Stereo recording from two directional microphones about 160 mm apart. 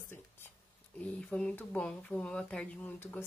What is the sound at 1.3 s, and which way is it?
Speech, 5° left (ahead or behind).